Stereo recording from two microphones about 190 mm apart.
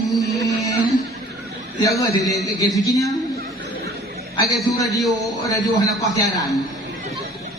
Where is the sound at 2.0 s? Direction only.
15° left (ahead or behind).